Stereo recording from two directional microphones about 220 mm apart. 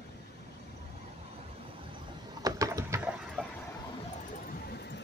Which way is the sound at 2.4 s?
15° right (ahead or behind).